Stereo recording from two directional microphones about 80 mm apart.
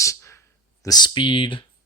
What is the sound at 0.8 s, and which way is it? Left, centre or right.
Speech, left.